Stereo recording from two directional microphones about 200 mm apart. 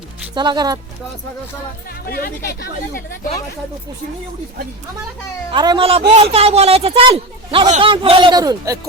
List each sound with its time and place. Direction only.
0.3 s speech: 20° right (ahead or behind)
2.0 s speech: 50° left (ahead or behind)
5.5 s speech: 25° right (ahead or behind)